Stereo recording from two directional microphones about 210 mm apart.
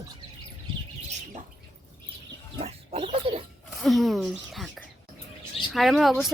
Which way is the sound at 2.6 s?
30° right (ahead or behind).